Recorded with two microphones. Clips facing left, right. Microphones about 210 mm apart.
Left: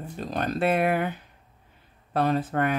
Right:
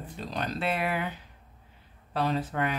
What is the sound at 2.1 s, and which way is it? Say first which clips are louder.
Speech: left 5 dB; 50° left (ahead or behind).